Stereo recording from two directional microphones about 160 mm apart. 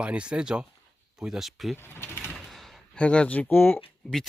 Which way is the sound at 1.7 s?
15° left (ahead or behind).